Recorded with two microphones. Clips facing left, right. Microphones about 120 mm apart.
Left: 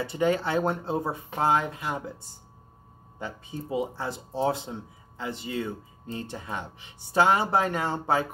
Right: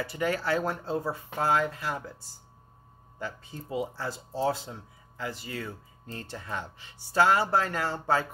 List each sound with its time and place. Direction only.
0.0 s speech: 25° left (ahead or behind)